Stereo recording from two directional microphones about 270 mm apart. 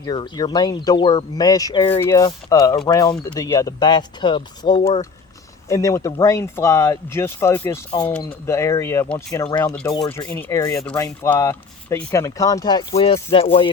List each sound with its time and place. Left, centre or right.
0.0 s speech: centre